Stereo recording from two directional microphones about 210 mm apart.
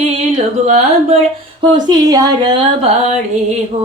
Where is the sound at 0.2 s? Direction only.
30° right (ahead or behind).